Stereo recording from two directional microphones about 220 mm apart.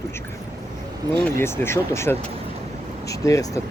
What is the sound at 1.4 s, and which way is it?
Speech, 10° left (ahead or behind).